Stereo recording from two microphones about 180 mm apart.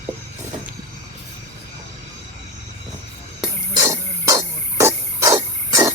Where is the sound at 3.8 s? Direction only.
20° right (ahead or behind).